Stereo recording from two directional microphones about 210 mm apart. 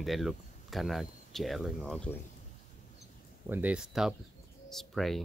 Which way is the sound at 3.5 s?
5° right (ahead or behind).